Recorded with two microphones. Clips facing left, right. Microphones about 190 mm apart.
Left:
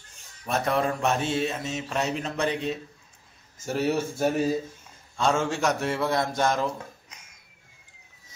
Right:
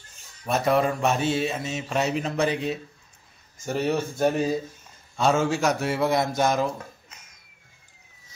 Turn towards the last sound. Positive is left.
turn(degrees=-10)  # may be behind; listen again after turning